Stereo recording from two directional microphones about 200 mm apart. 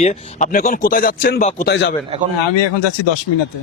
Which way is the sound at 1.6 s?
60° left (ahead or behind).